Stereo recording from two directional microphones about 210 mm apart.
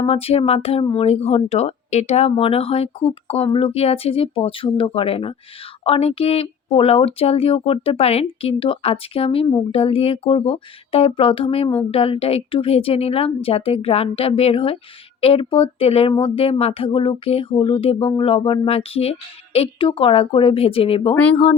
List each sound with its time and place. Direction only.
0.0 s speech: 30° left (ahead or behind)